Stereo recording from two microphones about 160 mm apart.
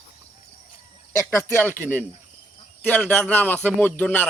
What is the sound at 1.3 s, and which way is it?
Speech, 15° left (ahead or behind).